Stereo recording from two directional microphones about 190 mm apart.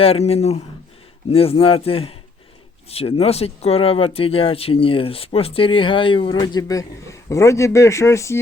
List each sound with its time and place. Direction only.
0.0 s a man's voice: 30° left (ahead or behind); by 8.4 s 15° left (ahead or behind)